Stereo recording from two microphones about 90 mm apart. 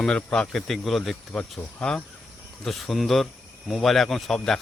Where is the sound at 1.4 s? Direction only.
15° left (ahead or behind).